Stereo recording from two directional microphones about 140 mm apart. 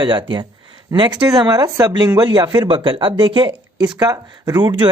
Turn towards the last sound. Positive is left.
turn(degrees=-35)  # may be behind; listen again after turning